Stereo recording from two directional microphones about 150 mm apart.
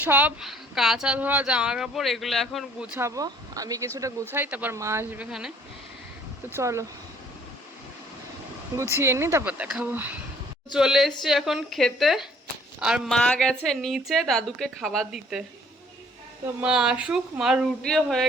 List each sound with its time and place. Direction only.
0.0 s speech: 10° right (ahead or behind)
3.0 s speech: 25° right (ahead or behind); by 5.5 s 5° right (ahead or behind)
6.6 s speech: 20° right (ahead or behind)
9.0 s speech: 15° right (ahead or behind)
16.6 s speech: 5° right (ahead or behind)